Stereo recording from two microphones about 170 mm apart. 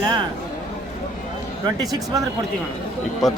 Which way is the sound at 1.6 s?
20° right (ahead or behind).